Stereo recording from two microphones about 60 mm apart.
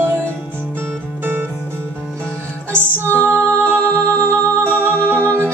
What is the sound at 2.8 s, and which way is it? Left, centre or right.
Music, right.